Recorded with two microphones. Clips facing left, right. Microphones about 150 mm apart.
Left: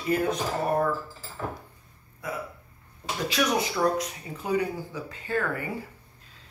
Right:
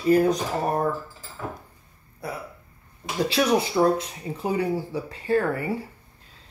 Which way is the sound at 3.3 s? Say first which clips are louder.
Right 4 dB; 30° right (ahead or behind).